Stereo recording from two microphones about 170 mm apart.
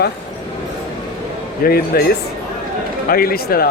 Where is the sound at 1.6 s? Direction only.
65° left (ahead or behind).